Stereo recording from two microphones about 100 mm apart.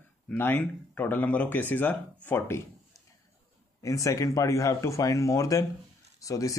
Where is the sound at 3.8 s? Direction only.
35° left (ahead or behind).